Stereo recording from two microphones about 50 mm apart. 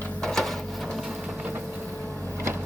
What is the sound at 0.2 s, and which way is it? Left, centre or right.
Printer, centre.